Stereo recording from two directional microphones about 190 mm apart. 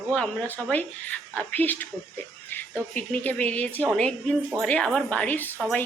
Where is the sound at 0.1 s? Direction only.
5° left (ahead or behind).